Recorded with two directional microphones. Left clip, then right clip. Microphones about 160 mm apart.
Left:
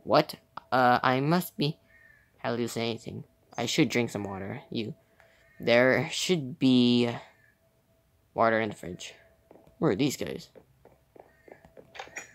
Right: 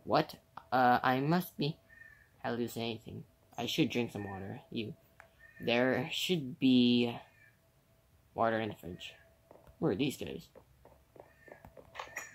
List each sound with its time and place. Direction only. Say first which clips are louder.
0.1 s speech: left 7 dB; 35° left (ahead or behind)
8.4 s speech: left 7 dB; 40° left (ahead or behind)
11.4 s a sound: left 3 dB; 20° left (ahead or behind)